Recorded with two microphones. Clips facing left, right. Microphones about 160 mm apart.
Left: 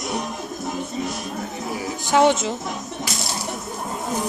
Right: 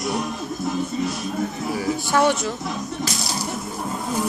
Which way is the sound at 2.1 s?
20° left (ahead or behind).